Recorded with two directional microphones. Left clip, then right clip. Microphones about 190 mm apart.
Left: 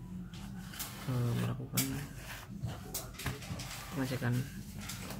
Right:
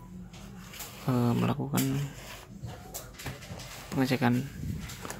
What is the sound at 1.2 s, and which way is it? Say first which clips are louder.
Speech: right 10 dB; 40° right (ahead or behind).